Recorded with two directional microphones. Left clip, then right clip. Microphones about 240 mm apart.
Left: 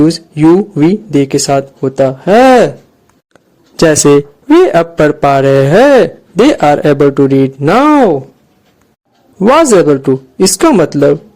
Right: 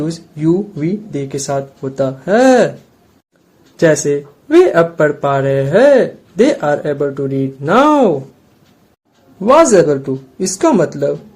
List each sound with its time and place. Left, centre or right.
0.0 s a man's voice: left
3.8 s a man's voice: left
9.4 s a man's voice: left